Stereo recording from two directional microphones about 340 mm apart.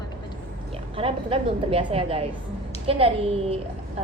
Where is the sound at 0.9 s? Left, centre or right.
Centre.